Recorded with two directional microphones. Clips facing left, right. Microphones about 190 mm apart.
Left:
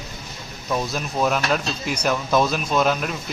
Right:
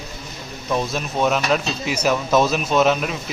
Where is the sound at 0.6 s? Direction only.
Centre (ahead or behind).